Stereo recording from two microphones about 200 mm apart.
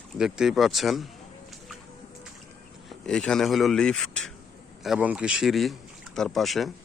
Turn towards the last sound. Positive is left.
turn(degrees=0)  # may be behind; listen again after turning